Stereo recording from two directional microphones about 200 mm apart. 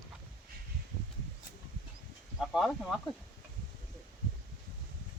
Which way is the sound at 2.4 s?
Centre (ahead or behind).